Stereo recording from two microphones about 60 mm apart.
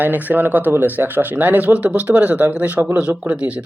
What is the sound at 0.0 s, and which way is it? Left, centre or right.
Speech, right.